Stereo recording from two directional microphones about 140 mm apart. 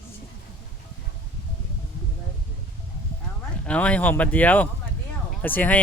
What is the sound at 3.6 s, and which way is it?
Speech, 10° left (ahead or behind).